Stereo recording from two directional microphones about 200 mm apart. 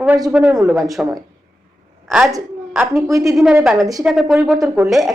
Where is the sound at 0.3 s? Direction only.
5° right (ahead or behind).